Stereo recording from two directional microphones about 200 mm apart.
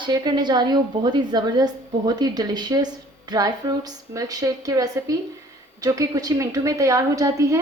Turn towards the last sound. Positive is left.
turn(degrees=-15)  # may be behind; listen again after turning